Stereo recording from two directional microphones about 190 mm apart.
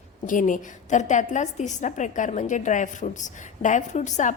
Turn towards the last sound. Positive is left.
turn(degrees=40)  # may be behind; listen again after turning